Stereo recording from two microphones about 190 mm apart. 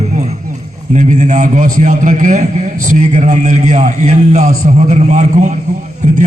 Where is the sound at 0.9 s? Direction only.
40° right (ahead or behind).